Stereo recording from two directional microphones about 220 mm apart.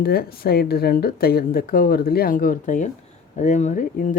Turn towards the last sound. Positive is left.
turn(degrees=35)  # may be behind; listen again after turning